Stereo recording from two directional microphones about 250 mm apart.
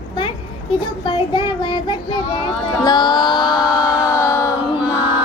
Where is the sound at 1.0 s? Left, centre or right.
Left.